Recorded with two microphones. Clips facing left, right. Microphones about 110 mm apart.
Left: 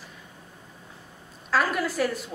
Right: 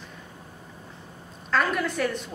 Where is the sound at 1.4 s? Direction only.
5° left (ahead or behind).